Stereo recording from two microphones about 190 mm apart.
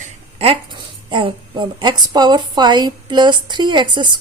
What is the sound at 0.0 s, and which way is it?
A woman's voice, 30° right (ahead or behind).